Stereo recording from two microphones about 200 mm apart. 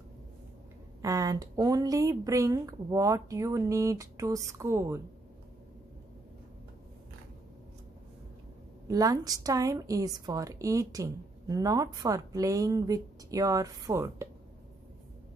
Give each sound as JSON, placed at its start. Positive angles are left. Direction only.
{"t": 1.0, "sound": "a woman's voice", "side_deg": -15}
{"t": 8.8, "sound": "a woman's voice", "side_deg": -15}